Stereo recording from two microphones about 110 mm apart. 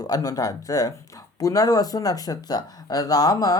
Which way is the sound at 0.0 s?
35° left (ahead or behind).